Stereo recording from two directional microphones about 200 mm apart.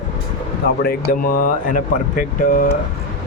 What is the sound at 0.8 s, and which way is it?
Speech, 50° left (ahead or behind).